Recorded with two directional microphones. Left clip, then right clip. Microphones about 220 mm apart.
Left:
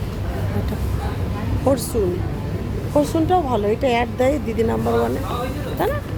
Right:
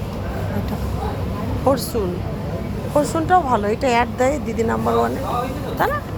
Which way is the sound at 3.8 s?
20° left (ahead or behind).